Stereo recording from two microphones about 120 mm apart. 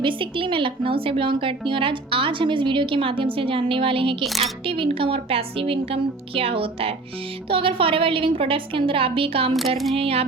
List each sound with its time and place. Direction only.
0.0 s speech: 45° right (ahead or behind)
9.5 s speech: centre (ahead or behind)
9.9 s a sound: 55° right (ahead or behind)